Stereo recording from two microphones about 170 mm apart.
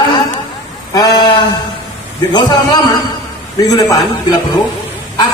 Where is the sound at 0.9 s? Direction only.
25° left (ahead or behind).